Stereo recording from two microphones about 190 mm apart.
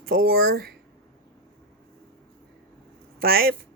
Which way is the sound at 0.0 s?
50° right (ahead or behind).